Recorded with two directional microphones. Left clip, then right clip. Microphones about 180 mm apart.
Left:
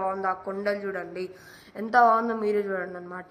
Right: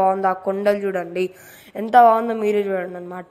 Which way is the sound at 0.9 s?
65° right (ahead or behind).